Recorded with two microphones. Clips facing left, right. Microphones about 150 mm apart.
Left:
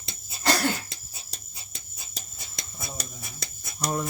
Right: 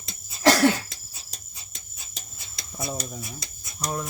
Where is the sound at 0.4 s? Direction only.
85° right.